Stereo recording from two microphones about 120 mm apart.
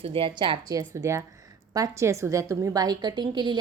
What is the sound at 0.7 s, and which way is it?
A woman's voice, 30° right (ahead or behind).